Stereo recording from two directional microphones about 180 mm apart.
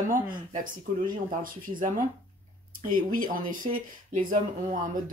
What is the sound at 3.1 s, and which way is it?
Speech, 50° right (ahead or behind).